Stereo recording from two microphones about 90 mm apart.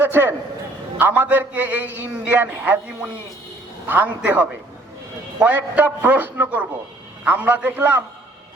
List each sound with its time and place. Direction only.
0.0 s a man's voice: 25° right (ahead or behind)